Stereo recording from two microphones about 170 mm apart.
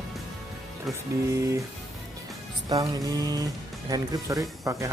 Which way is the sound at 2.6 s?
20° right (ahead or behind).